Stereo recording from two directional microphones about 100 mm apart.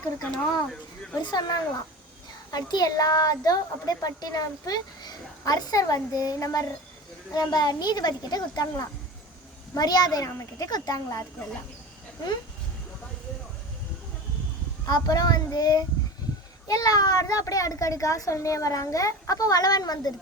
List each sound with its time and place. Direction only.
1.2 s speech: 40° left (ahead or behind)
14.8 s speech: 40° left (ahead or behind)